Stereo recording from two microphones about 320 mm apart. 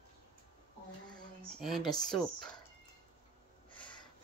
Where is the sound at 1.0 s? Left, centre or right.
Centre.